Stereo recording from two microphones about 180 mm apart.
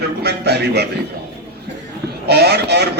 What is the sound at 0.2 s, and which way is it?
Speech, 65° right (ahead or behind).